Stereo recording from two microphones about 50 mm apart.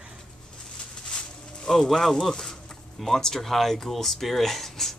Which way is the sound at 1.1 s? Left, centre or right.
Centre.